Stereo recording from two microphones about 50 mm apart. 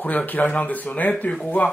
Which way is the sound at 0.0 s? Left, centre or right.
Left.